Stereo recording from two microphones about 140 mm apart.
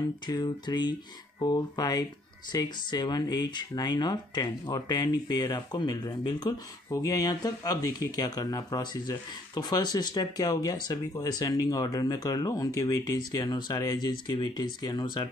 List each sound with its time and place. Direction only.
0.3 s speech: 30° left (ahead or behind)